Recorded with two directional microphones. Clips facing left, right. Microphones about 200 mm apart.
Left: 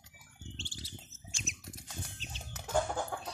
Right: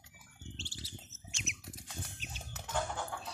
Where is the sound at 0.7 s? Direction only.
Centre (ahead or behind).